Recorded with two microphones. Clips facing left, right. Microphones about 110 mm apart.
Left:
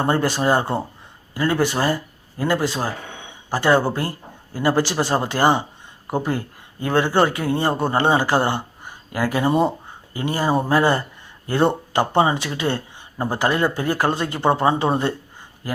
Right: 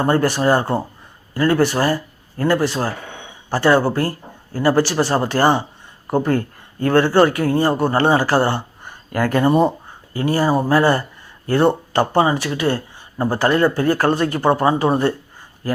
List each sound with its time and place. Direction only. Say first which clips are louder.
0.0 s speech: right 3 dB; 20° left (ahead or behind)
10.1 s speech: right 4 dB; 20° left (ahead or behind)